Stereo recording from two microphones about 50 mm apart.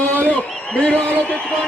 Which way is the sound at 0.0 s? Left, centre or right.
Left.